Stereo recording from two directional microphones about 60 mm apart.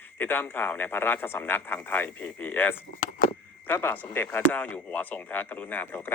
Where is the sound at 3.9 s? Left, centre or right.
Left.